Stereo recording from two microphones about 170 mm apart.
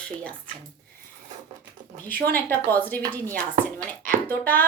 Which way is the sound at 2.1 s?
60° right (ahead or behind).